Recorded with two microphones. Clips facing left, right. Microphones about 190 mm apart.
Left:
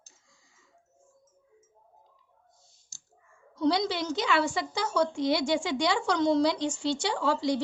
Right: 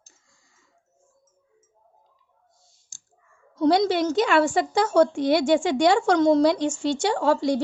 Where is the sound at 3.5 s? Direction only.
50° right (ahead or behind).